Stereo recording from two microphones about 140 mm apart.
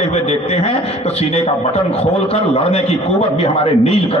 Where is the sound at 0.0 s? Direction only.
50° left (ahead or behind).